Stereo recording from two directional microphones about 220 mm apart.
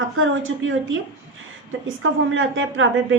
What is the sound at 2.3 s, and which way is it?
Speech, 60° right (ahead or behind).